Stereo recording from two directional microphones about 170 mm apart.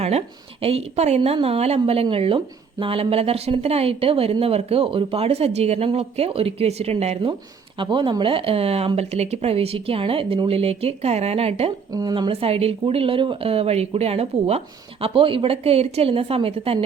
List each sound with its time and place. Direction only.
0.0 s a woman's voice: 35° right (ahead or behind)
11.9 s a woman's voice: 20° right (ahead or behind)